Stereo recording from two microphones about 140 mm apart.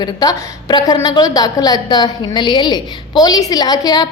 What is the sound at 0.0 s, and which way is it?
A woman's voice, 30° left (ahead or behind).